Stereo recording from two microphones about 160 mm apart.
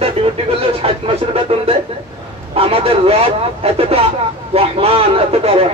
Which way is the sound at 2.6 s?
35° right (ahead or behind).